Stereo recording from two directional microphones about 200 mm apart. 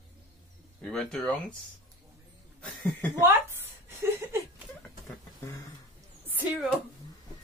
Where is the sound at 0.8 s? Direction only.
5° left (ahead or behind).